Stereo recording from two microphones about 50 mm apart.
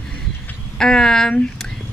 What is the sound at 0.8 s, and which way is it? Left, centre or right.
Speech, centre.